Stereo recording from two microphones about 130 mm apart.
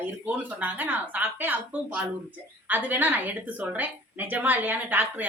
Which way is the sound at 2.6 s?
15° right (ahead or behind).